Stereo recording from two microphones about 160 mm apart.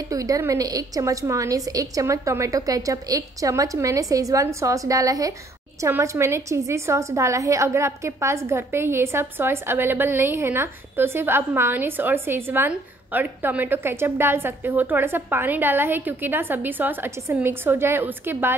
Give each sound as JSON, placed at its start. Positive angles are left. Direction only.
{"t": 0.1, "sound": "a woman's voice", "side_deg": -20}